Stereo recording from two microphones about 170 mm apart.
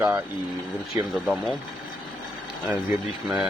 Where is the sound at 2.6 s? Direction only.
10° right (ahead or behind).